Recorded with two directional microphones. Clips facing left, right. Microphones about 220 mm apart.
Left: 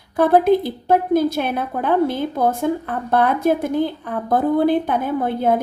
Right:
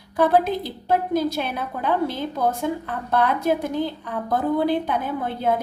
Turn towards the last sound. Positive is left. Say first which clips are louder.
# left 5 dB
turn(degrees=55)  # may be behind; listen again after turning